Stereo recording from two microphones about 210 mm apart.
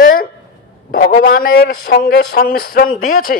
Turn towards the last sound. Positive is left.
turn(degrees=45)  # may be behind; listen again after turning